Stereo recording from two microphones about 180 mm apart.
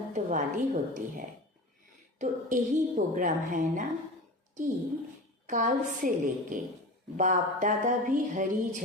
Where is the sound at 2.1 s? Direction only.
45° right (ahead or behind).